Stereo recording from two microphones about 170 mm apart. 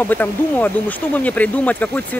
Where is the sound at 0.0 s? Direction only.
10° left (ahead or behind).